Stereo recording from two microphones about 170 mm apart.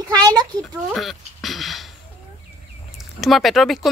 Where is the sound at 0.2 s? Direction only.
25° right (ahead or behind).